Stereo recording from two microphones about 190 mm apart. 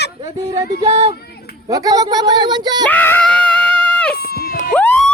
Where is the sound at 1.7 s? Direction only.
20° right (ahead or behind).